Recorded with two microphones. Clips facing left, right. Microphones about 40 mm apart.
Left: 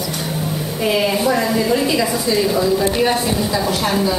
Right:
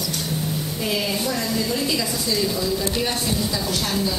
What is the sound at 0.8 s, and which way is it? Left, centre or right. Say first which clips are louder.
A woman's voice: left 9 dB; left.